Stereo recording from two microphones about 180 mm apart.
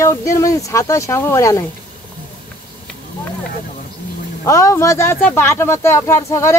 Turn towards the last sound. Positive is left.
turn(degrees=15)  # may be behind; listen again after turning